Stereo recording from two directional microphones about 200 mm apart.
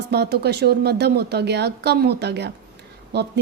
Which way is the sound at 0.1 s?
55° right (ahead or behind).